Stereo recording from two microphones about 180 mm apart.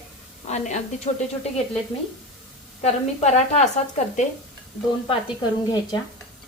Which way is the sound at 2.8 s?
40° left (ahead or behind).